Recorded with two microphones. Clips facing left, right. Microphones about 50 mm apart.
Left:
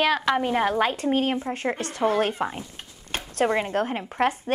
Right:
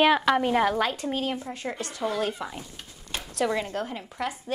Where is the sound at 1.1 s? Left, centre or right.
Left.